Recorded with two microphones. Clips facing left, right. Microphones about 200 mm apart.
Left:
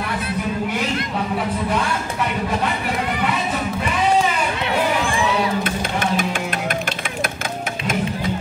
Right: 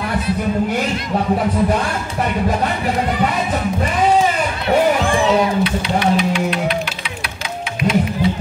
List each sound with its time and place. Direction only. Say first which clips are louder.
5.6 s music: right 5 dB; 50° left (ahead or behind)
7.8 s music: right 7 dB; 45° left (ahead or behind)